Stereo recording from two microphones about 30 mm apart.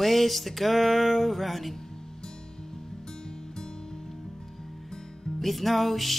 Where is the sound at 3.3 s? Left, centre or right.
Left.